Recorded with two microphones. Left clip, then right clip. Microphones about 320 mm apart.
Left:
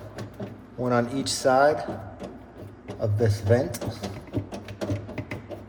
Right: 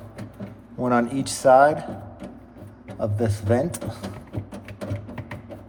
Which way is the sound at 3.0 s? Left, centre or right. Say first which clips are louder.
Even; right.